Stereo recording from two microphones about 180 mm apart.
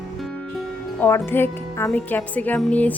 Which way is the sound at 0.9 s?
10° left (ahead or behind).